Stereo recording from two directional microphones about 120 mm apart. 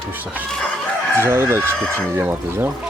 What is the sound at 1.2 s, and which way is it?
Speech, 20° right (ahead or behind).